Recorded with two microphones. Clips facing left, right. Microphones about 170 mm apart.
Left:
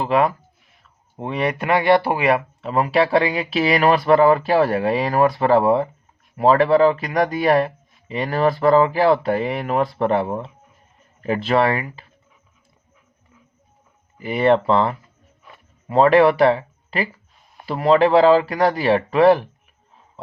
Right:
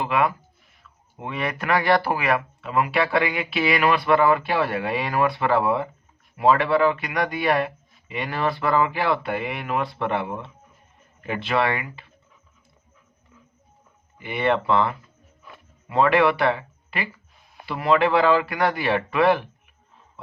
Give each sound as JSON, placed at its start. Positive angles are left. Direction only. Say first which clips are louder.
{"t": 0.0, "sound": "speech", "louder": "left 4 dB", "side_deg": 35}
{"t": 14.2, "sound": "speech", "louder": "left 6 dB", "side_deg": 35}